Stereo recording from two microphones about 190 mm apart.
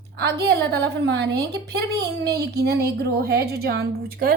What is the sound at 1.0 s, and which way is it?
Speech, 65° right (ahead or behind).